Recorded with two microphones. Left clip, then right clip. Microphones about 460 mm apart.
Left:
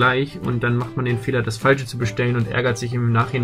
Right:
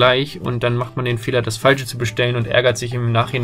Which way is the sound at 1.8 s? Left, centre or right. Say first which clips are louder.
Right 3 dB; right.